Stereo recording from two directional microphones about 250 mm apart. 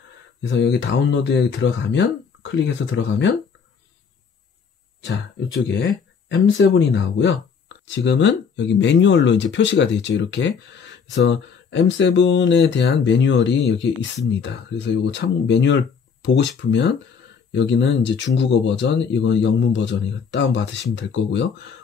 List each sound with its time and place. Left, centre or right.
0.4 s speech: left
5.0 s speech: left